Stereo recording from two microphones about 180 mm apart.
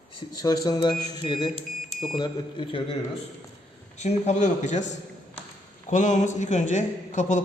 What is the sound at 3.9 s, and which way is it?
Speech, 40° left (ahead or behind).